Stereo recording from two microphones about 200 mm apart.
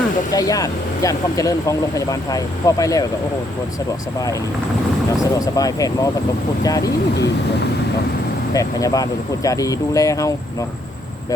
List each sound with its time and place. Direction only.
0.3 s speech: 15° left (ahead or behind)
5.2 s speech: 15° left (ahead or behind)
8.5 s speech: 15° left (ahead or behind)